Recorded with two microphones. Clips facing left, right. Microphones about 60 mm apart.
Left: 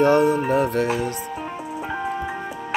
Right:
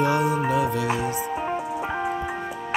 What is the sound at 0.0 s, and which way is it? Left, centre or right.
Music, left.